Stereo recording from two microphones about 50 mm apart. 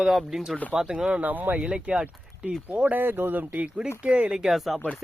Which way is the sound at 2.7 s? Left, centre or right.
Right.